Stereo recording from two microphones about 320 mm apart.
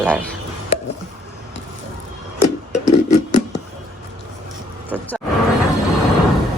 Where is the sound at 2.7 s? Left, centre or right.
Left.